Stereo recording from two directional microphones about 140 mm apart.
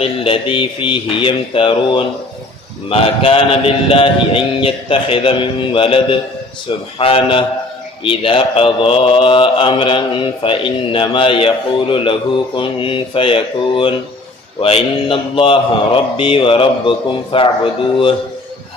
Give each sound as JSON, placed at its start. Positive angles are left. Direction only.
{"t": 0.0, "sound": "speech", "side_deg": 40}